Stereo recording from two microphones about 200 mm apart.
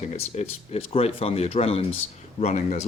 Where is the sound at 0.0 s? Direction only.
30° left (ahead or behind).